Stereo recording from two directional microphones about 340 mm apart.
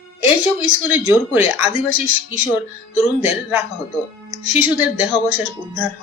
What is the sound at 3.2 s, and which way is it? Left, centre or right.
Speech, centre.